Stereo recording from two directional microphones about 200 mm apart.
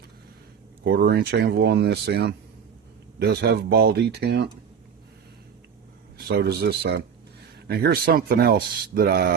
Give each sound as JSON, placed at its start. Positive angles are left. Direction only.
{"t": 0.9, "sound": "speech", "side_deg": -50}
{"t": 6.2, "sound": "speech", "side_deg": -55}